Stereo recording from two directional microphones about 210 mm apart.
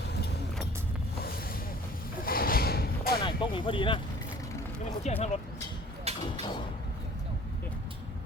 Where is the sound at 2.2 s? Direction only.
45° left (ahead or behind).